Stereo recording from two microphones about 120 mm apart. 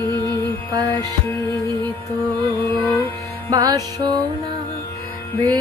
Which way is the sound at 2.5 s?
15° left (ahead or behind).